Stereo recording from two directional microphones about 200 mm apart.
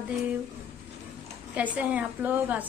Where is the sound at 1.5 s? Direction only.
5° right (ahead or behind).